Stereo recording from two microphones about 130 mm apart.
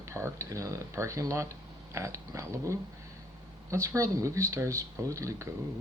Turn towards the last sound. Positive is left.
turn(degrees=-25)  # may be behind; listen again after turning